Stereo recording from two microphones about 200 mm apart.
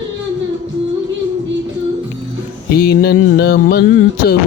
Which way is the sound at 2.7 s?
55° left (ahead or behind).